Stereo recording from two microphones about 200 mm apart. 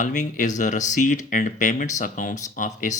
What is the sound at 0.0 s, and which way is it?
Speech, 40° left (ahead or behind).